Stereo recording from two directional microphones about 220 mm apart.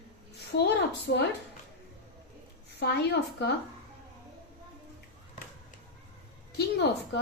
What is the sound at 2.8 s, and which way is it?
Speech, 50° left (ahead or behind).